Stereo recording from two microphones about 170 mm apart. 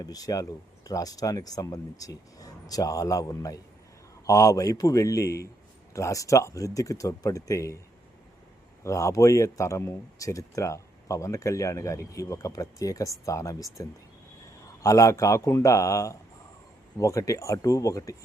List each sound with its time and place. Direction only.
0.0 s speech: 20° left (ahead or behind)
8.8 s a man's voice: 20° left (ahead or behind)